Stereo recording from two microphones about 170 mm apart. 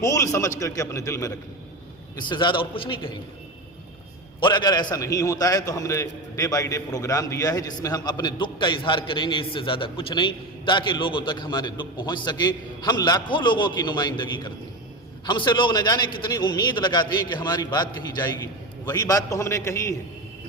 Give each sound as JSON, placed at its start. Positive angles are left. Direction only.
{"t": 0.0, "sound": "a man's voice", "side_deg": 20}
{"t": 4.4, "sound": "a man's voice", "side_deg": 25}